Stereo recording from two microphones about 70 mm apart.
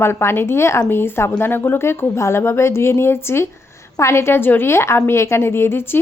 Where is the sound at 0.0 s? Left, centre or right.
Left.